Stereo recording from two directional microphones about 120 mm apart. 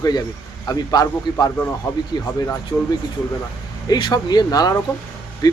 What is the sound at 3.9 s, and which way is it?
A man's voice, 35° left (ahead or behind).